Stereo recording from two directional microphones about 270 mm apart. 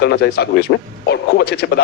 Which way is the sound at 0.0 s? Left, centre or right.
Left.